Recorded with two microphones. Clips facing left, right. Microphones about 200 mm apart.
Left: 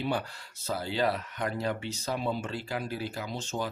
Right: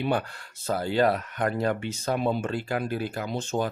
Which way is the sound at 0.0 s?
60° right (ahead or behind).